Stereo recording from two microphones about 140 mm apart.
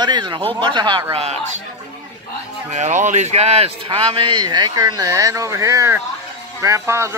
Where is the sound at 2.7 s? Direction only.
55° right (ahead or behind).